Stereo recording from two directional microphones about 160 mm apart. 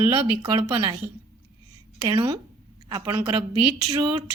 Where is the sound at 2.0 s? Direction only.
25° right (ahead or behind).